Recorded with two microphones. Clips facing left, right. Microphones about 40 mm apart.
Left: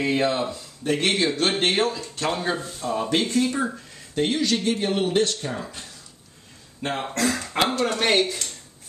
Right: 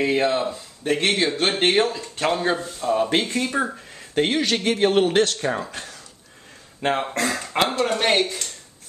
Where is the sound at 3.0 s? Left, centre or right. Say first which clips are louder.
Left 2 dB; right.